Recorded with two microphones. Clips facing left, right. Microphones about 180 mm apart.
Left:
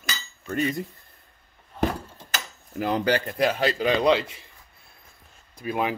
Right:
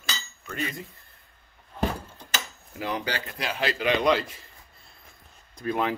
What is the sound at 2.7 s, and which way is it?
Speech, 50° left (ahead or behind).